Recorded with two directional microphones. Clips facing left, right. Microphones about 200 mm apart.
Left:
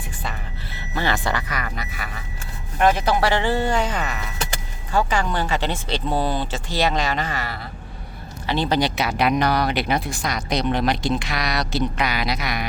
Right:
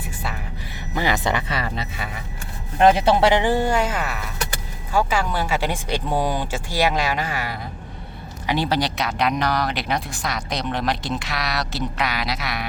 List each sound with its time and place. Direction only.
0.2 s music: 10° right (ahead or behind)
2.7 s speech: 25° right (ahead or behind); by 8.8 s 10° right (ahead or behind)
8.8 s speech: 5° left (ahead or behind)